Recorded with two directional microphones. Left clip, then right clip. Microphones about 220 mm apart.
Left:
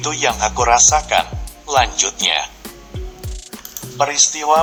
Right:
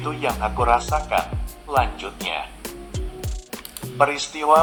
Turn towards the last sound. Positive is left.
turn(degrees=30)  # may be behind; listen again after turning